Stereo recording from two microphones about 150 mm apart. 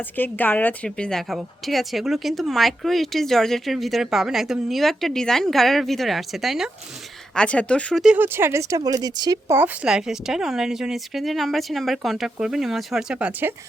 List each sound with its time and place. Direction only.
0.0 s a woman's voice: 10° left (ahead or behind)
8.0 s speech: 10° right (ahead or behind)
9.6 s a woman's voice: 10° right (ahead or behind)